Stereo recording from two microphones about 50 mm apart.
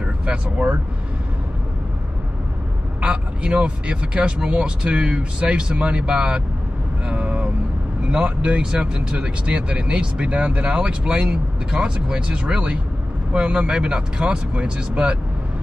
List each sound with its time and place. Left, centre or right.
0.0 s speech: right
3.0 s speech: right
7.1 s vehicle: right
8.1 s speech: right